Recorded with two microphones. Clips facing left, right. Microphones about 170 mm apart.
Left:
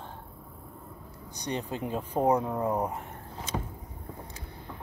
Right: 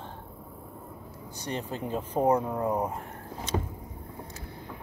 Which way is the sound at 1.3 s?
15° left (ahead or behind).